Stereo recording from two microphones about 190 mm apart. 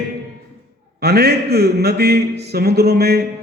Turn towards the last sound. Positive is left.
turn(degrees=-55)  # may be behind; listen again after turning